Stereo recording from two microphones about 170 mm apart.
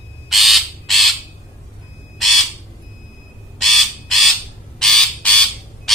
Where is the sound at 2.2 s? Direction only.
Centre (ahead or behind).